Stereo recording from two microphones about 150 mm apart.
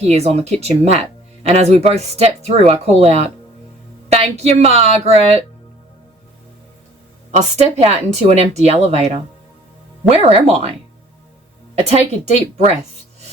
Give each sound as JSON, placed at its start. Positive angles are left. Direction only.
{"t": 0.0, "sound": "speech", "side_deg": -45}
{"t": 7.3, "sound": "speech", "side_deg": -50}